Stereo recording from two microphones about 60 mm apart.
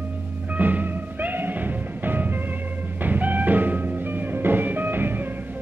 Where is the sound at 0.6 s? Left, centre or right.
Right.